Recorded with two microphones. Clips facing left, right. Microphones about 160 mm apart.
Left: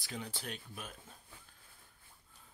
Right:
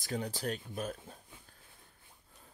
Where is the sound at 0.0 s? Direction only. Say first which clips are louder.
Right 8 dB; 45° right (ahead or behind).